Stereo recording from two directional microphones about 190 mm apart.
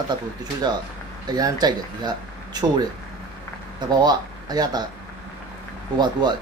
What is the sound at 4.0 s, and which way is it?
Speech, 20° right (ahead or behind).